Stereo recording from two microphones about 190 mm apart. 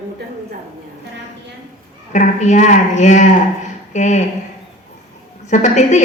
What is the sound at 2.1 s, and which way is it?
A woman's voice, 40° left (ahead or behind).